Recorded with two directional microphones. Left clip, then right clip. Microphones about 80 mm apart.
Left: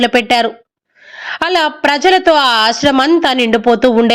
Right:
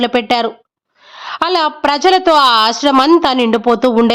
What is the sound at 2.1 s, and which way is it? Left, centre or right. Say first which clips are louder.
Speech: right 1 dB; right.